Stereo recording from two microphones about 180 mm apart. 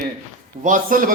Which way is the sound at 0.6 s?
50° right (ahead or behind).